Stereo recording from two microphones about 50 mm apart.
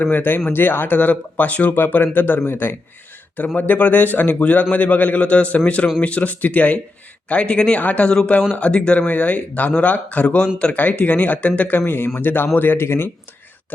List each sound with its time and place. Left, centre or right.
0.0 s a man's voice: left
3.3 s a man's voice: left
9.0 s a man's voice: left
11.9 s a man's voice: left